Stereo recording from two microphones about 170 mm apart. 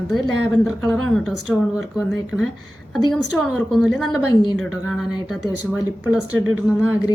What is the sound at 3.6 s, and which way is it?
A woman's voice, 5° left (ahead or behind).